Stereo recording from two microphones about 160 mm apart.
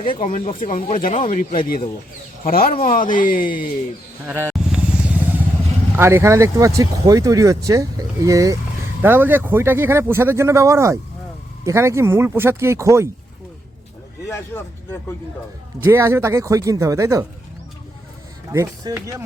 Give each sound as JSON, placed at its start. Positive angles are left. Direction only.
{"t": 0.3, "sound": "speech", "side_deg": 50}
{"t": 1.6, "sound": "speech", "side_deg": 65}
{"t": 4.3, "sound": "vehicle", "side_deg": -10}
{"t": 6.0, "sound": "speech", "side_deg": -15}
{"t": 15.8, "sound": "speech", "side_deg": -15}
{"t": 18.5, "sound": "speech", "side_deg": -20}